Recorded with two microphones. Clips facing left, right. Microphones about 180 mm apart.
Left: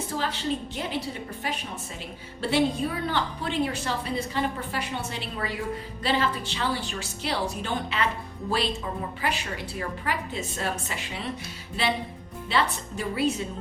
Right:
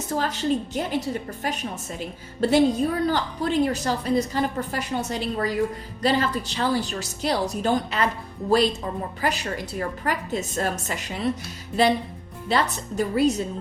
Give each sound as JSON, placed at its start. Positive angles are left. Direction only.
{"t": 0.1, "sound": "a woman's voice", "side_deg": -45}
{"t": 2.4, "sound": "a woman's voice", "side_deg": -40}